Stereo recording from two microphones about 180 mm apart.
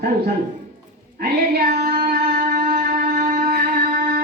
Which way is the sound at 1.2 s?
55° right (ahead or behind).